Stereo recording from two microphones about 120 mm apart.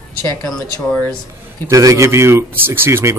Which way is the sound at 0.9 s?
10° left (ahead or behind).